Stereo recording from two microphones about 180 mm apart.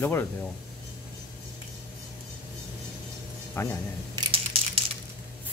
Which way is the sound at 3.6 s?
15° left (ahead or behind).